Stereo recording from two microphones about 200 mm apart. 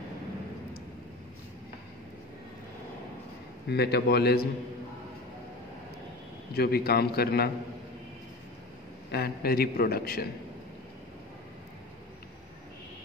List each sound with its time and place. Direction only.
3.6 s a man's voice: 55° left (ahead or behind)
6.5 s a man's voice: 50° left (ahead or behind)
9.1 s a man's voice: 50° left (ahead or behind)